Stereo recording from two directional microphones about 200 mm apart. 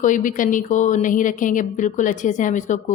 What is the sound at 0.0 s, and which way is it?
A woman's voice, 40° left (ahead or behind).